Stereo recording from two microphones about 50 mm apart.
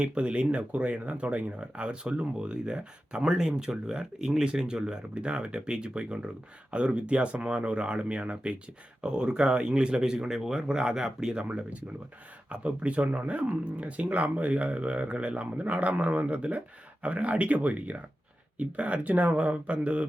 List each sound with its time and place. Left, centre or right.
0.0 s speech: right
11.4 s speech: right